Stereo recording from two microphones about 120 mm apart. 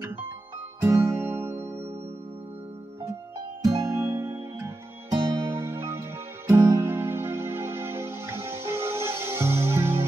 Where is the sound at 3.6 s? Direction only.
25° right (ahead or behind).